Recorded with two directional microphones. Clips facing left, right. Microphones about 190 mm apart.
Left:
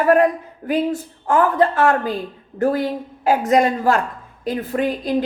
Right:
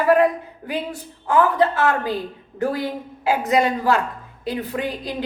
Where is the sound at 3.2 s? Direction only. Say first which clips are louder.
Left 3 dB; 45° left (ahead or behind).